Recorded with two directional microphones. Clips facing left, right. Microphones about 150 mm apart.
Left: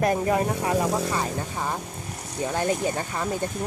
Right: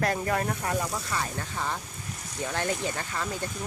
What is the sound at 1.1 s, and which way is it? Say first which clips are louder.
Speech: left 5 dB; 20° left (ahead or behind).